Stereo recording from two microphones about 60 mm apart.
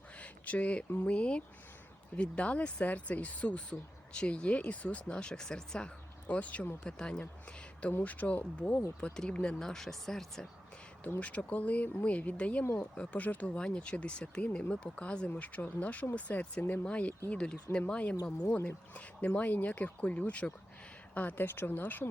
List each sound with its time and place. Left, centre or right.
0.2 s speech: left
6.2 s speech: left
8.0 s speech: left; by 10.5 s centre
11.2 s speech: left
13.6 s speech: centre; by 22.1 s left